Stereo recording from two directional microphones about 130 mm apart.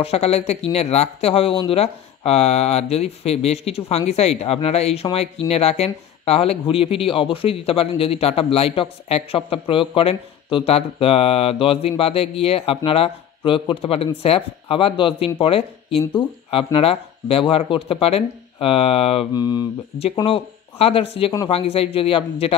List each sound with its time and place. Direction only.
0.0 s speech: 50° left (ahead or behind)
16.0 s speech: 15° left (ahead or behind)
16.4 s speech: 45° left (ahead or behind)
19.3 s mantra: 30° left (ahead or behind)
20.2 s speech: 45° left (ahead or behind)